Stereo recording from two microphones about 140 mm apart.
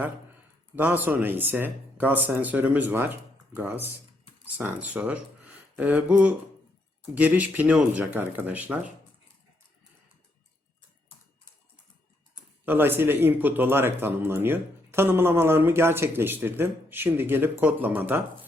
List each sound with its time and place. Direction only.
0.8 s speech: 10° right (ahead or behind)
12.6 s speech: 15° right (ahead or behind)